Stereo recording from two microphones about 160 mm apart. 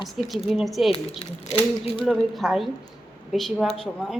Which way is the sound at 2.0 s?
Centre (ahead or behind).